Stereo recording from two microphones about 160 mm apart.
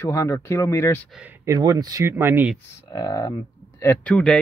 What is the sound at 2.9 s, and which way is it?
Speech, 25° left (ahead or behind).